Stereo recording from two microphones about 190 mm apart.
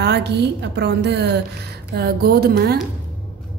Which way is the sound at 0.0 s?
60° right (ahead or behind).